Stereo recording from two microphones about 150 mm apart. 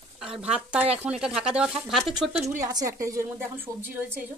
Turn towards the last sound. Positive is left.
turn(degrees=-15)  # may be behind; listen again after turning